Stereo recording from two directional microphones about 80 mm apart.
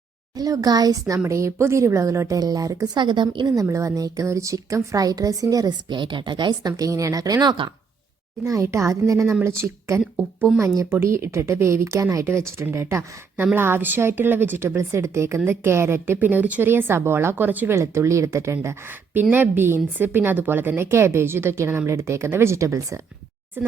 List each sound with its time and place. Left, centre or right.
0.3 s a woman's voice: right
1.3 s a woman's voice: right
3.0 s a woman's voice: right
3.4 s a woman's voice: right
5.9 s speech: right
8.4 s a woman's voice: right
11.0 s a woman's voice: right
16.1 s speech: right
17.7 s a woman's voice: right
19.2 s a woman's voice: right